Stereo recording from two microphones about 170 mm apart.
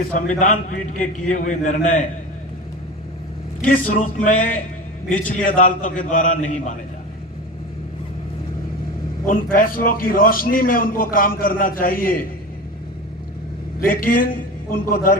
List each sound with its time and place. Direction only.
0.1 s a man's voice: 50° left (ahead or behind)
3.7 s a man's voice: 50° left (ahead or behind)
9.2 s a man's voice: 55° left (ahead or behind)
13.8 s a man's voice: 55° left (ahead or behind)